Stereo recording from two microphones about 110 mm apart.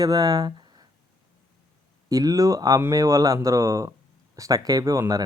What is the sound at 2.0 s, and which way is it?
Speech, 35° right (ahead or behind).